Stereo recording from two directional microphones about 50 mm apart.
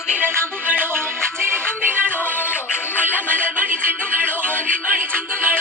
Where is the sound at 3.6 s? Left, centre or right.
Right.